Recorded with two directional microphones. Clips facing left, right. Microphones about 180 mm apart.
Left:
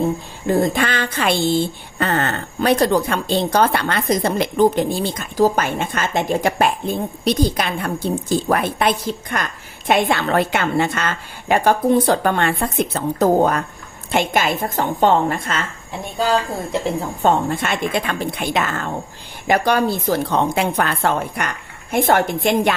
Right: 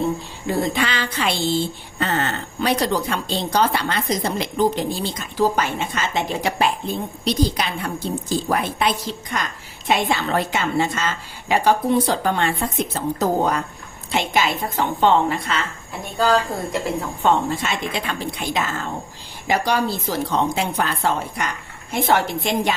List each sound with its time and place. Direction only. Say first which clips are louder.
0.4 s a woman's voice: left 4 dB; 45° left (ahead or behind)
17.2 s speech: left 2 dB; 55° left (ahead or behind)